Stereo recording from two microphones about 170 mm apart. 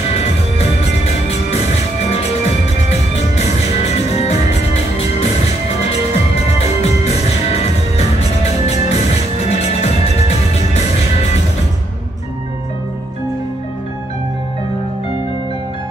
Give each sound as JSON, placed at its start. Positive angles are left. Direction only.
{"t": 0.2, "sound": "music", "side_deg": 40}